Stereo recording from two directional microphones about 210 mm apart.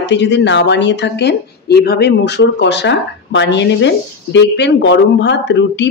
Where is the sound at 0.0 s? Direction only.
55° left (ahead or behind).